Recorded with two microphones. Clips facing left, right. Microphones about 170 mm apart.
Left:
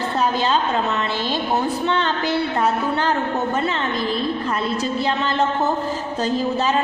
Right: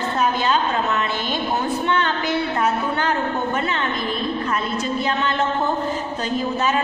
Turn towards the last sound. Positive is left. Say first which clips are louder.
# left 1 dB
turn(degrees=30)  # may be behind; listen again after turning